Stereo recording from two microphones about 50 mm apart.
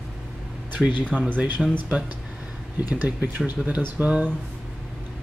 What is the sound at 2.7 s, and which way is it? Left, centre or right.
Speech, right.